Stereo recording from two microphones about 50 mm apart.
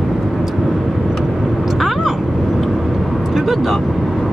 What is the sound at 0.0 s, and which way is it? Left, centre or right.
Vehicle, centre.